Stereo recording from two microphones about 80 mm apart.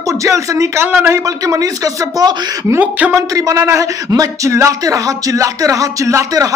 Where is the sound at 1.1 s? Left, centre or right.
Right.